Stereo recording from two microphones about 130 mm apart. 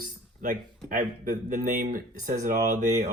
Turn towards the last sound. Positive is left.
turn(degrees=-65)  # may be behind; listen again after turning